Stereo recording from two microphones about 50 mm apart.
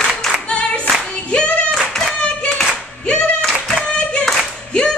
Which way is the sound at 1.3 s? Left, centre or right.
Left.